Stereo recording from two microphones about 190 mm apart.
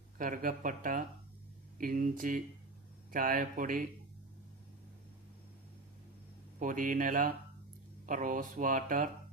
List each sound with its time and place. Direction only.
0.2 s speech: 45° right (ahead or behind)
6.6 s speech: 45° right (ahead or behind)